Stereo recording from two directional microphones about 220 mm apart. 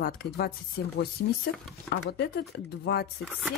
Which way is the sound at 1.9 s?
50° left (ahead or behind).